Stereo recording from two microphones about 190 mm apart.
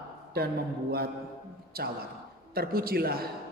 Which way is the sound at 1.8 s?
50° right (ahead or behind).